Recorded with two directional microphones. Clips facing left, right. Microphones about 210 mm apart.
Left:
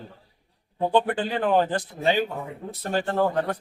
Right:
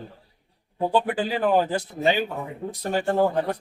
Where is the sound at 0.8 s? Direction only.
5° right (ahead or behind).